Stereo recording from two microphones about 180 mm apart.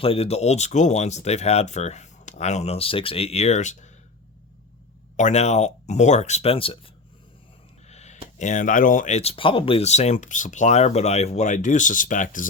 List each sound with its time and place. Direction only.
0.0 s speech: 35° left (ahead or behind)
5.1 s speech: 40° left (ahead or behind)
7.9 s a sound: 40° left (ahead or behind)
8.4 s speech: 45° left (ahead or behind)